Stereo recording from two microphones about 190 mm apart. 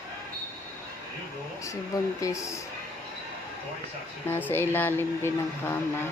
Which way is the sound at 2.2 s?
15° left (ahead or behind).